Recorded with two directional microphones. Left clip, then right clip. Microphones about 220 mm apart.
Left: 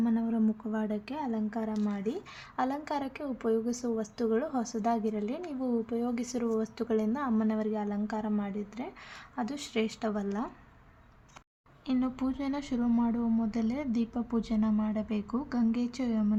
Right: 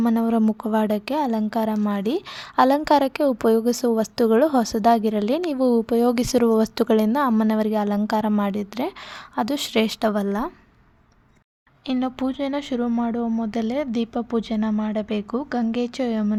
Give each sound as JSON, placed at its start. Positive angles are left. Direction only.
{"t": 0.0, "sound": "a woman's voice", "side_deg": -45}
{"t": 11.9, "sound": "speech", "side_deg": -35}